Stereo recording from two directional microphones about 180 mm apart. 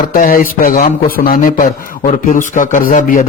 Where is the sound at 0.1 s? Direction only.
50° left (ahead or behind).